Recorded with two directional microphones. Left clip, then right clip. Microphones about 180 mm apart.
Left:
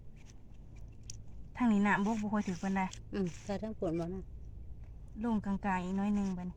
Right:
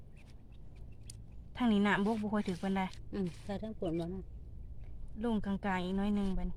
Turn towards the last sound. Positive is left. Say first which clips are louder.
# even
turn(degrees=-20)  # may be behind; listen again after turning